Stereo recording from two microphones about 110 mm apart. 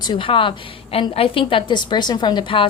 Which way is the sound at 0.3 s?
55° left (ahead or behind).